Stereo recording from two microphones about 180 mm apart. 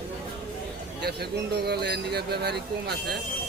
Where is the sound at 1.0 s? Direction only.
60° right (ahead or behind).